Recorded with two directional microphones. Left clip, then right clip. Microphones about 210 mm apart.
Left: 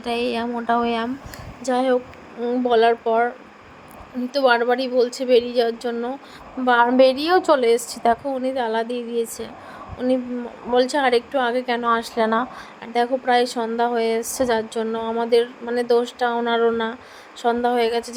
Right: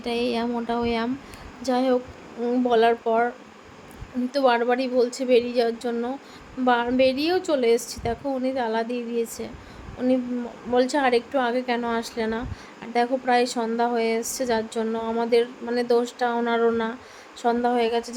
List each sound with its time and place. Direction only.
0.0 s a woman's voice: 10° left (ahead or behind)
10.7 s a woman's voice: 15° left (ahead or behind)